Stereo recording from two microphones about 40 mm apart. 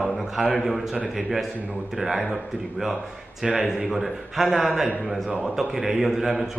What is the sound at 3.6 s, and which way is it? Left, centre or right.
Speech, centre.